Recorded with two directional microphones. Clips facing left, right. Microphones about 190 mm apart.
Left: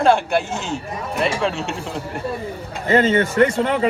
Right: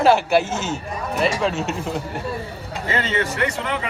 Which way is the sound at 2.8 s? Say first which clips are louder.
Left 7 dB; 45° left (ahead or behind).